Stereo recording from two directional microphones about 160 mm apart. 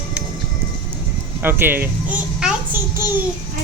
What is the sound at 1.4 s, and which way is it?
A child's voice, 10° right (ahead or behind).